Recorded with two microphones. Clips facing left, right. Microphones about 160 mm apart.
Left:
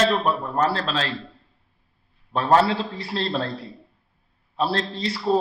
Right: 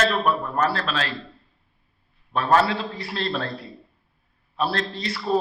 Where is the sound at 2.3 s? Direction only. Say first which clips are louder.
Left 1 dB; 30° left (ahead or behind).